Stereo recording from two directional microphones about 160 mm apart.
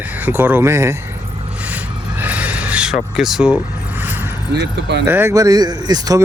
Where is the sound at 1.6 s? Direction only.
10° right (ahead or behind).